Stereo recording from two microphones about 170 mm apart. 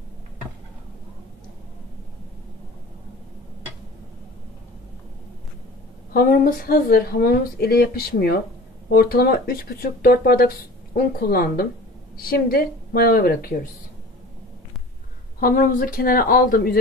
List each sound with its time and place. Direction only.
6.1 s speech: 60° left (ahead or behind)
15.4 s speech: 55° left (ahead or behind)